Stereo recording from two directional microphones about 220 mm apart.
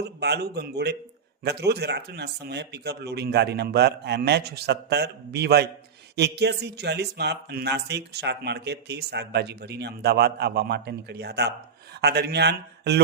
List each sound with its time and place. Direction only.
0.0 s speech: 50° right (ahead or behind)